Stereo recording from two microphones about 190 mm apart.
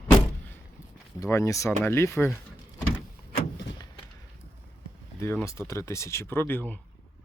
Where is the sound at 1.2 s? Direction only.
15° left (ahead or behind).